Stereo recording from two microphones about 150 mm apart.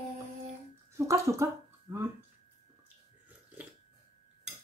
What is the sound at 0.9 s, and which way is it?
Speech, 20° right (ahead or behind).